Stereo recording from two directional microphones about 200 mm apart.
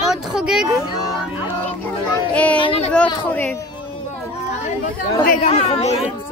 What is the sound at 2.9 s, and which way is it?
Speech, 10° left (ahead or behind).